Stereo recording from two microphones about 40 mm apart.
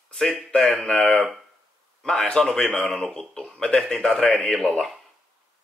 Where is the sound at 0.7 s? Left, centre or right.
Left.